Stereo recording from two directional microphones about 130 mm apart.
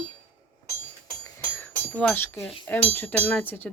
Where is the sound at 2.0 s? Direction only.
10° left (ahead or behind).